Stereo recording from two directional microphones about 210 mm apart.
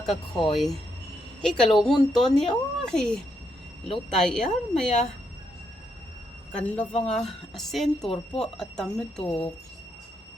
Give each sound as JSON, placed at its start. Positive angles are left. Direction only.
{"t": 0.0, "sound": "a woman's voice", "side_deg": 0}
{"t": 6.5, "sound": "a woman's voice", "side_deg": 5}
{"t": 9.2, "sound": "speech", "side_deg": 25}